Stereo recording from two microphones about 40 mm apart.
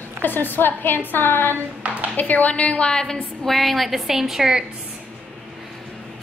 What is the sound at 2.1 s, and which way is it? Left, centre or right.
Speech, left.